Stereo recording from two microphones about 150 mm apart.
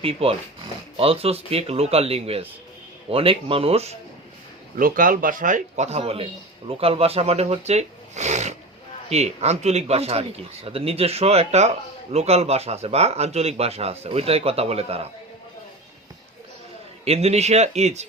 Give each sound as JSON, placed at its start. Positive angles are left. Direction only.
{"t": 0.0, "sound": "a man's voice", "side_deg": -40}
{"t": 4.8, "sound": "speech", "side_deg": -65}
{"t": 17.1, "sound": "speech", "side_deg": -45}